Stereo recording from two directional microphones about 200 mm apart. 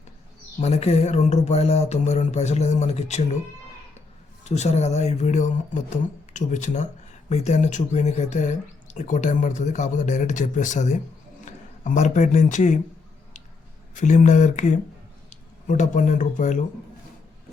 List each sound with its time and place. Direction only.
0.6 s speech: 30° left (ahead or behind)
4.4 s speech: 35° left (ahead or behind)
13.9 s speech: 40° left (ahead or behind)